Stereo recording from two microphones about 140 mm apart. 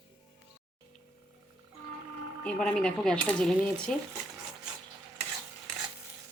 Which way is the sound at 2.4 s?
10° left (ahead or behind).